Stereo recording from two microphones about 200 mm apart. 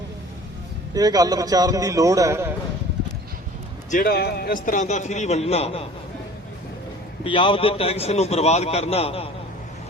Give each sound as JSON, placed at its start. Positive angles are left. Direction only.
{"t": 0.9, "sound": "a man's voice", "side_deg": -20}
{"t": 3.9, "sound": "a man's voice", "side_deg": 50}
{"t": 7.3, "sound": "a man's voice", "side_deg": 25}